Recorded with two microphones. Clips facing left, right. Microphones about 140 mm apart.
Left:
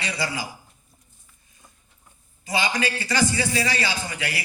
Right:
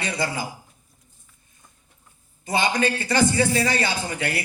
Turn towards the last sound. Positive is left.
turn(degrees=-50)  # may be behind; listen again after turning